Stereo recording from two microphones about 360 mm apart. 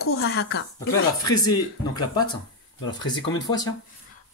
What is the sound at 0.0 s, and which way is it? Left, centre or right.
Speech, left.